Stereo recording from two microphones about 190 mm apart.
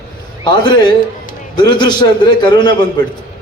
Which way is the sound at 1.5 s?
20° left (ahead or behind).